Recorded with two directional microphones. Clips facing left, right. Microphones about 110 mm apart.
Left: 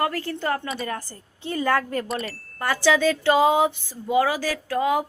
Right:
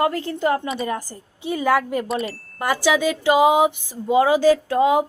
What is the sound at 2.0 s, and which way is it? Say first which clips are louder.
Chime: right 4 dB; centre (ahead or behind).